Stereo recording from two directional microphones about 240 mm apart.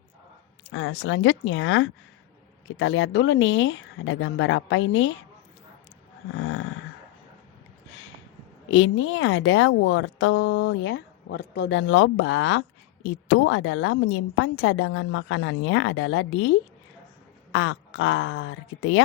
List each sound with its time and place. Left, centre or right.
0.7 s a woman's voice: left
6.3 s a sound: left
8.7 s a woman's voice: left